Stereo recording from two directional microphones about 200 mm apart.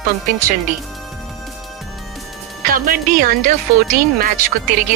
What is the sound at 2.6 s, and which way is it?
Speech, 45° right (ahead or behind).